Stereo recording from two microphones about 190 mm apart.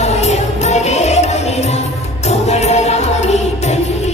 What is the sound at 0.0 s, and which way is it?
Music, 35° left (ahead or behind).